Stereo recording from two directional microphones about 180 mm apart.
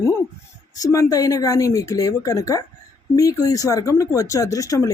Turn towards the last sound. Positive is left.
turn(degrees=20)  # may be behind; listen again after turning